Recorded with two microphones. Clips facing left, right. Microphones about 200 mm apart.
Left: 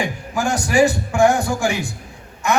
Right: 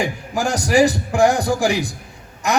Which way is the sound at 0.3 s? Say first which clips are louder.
Right 1 dB; 40° right (ahead or behind).